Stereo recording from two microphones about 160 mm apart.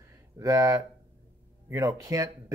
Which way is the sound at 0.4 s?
20° right (ahead or behind).